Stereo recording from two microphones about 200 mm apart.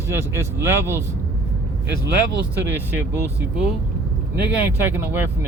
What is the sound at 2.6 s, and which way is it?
Speech, 10° right (ahead or behind).